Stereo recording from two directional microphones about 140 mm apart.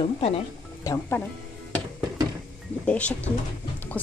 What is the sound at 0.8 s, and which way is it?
Speech, 20° left (ahead or behind).